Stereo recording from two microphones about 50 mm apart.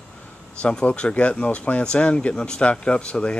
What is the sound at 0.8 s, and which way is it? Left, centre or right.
Speech, left.